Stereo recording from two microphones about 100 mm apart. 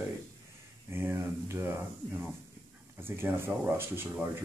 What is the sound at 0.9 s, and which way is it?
Speech, 20° right (ahead or behind).